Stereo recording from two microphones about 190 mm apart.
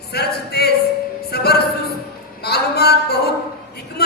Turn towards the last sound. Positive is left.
turn(degrees=60)  # may be behind; listen again after turning